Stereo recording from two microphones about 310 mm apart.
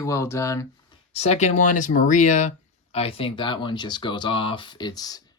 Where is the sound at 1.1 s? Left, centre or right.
Left.